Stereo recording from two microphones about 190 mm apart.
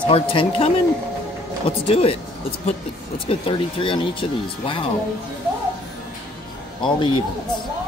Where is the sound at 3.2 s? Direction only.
30° left (ahead or behind).